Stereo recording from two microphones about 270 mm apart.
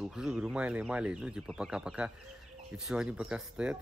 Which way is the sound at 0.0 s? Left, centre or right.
Centre.